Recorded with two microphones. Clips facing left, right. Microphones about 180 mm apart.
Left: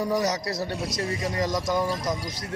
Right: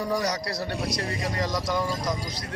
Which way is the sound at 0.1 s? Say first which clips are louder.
Left 2 dB; 25° left (ahead or behind).